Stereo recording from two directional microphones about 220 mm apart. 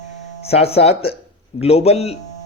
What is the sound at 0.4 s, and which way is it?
A man's voice, 25° left (ahead or behind).